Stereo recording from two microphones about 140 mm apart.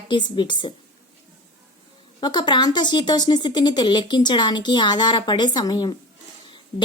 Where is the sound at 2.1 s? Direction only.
30° left (ahead or behind).